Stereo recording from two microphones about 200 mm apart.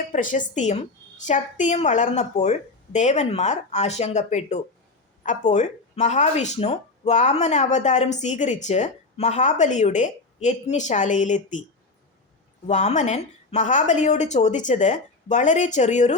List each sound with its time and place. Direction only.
0.1 s speech: 40° left (ahead or behind)
12.6 s speech: 35° left (ahead or behind)